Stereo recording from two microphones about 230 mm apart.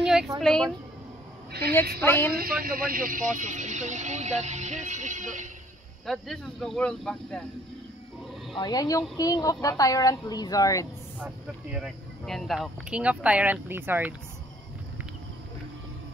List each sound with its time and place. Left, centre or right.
0.0 s a sound: centre
0.4 s speech: centre
2.0 s speech: centre
2.3 s speech: right
6.0 s speech: centre
8.5 s speech: centre
11.1 s speech: centre